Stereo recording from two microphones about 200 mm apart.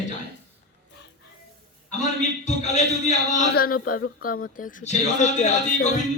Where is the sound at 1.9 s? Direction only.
35° left (ahead or behind).